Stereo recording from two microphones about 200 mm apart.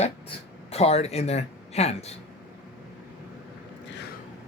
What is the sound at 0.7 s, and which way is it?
Speech, 30° left (ahead or behind).